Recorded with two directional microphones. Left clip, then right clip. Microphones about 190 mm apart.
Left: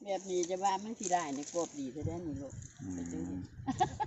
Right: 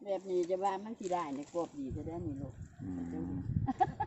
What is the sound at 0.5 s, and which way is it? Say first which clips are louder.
Speech: left 3 dB; 50° left (ahead or behind).